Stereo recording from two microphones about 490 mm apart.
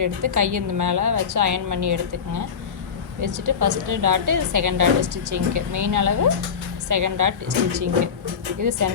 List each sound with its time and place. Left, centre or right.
0.0 s a woman's voice: right